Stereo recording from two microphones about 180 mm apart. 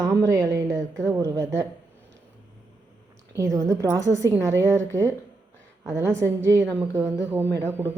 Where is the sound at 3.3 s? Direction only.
20° right (ahead or behind).